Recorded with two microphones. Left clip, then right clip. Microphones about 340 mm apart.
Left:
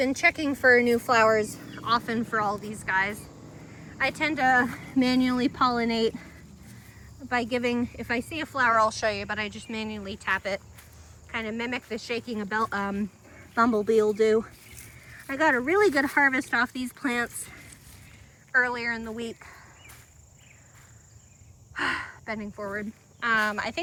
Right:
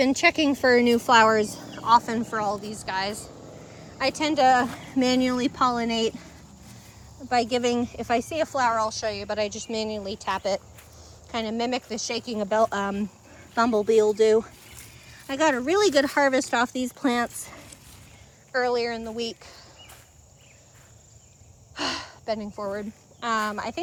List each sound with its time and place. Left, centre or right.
0.1 s a woman's voice: centre
4.5 s speech: centre
21.8 s speech: centre